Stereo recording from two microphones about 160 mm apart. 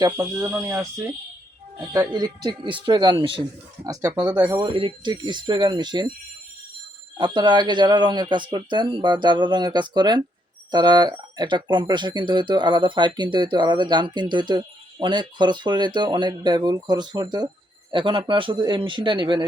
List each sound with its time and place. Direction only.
0.0 s speech: 20° right (ahead or behind)
7.2 s a man's voice: 30° right (ahead or behind)